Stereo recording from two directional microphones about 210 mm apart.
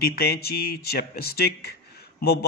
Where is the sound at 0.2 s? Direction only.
45° left (ahead or behind).